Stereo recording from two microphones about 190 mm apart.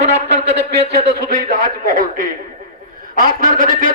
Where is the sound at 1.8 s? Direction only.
45° right (ahead or behind).